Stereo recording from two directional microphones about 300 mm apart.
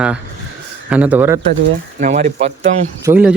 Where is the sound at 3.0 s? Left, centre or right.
Centre.